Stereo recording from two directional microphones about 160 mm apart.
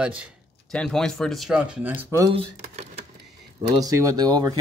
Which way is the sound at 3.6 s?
20° right (ahead or behind).